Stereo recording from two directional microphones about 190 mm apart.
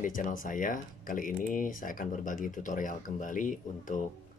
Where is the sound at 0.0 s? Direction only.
45° left (ahead or behind).